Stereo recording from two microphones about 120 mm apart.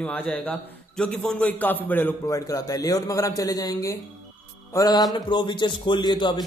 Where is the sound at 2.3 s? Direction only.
30° left (ahead or behind).